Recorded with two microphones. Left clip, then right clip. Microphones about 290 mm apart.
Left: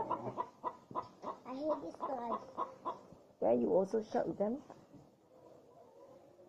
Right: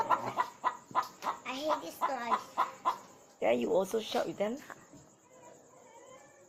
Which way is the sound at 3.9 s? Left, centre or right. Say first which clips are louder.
Right 3 dB; centre.